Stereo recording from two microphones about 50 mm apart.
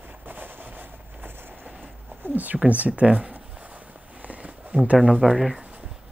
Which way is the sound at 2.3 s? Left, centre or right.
Right.